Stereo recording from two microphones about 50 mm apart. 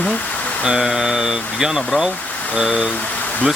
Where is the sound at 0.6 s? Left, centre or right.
Centre.